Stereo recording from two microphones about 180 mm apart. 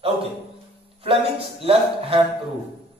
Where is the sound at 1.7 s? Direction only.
30° right (ahead or behind).